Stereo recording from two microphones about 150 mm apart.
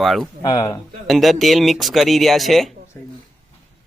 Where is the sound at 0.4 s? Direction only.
25° left (ahead or behind).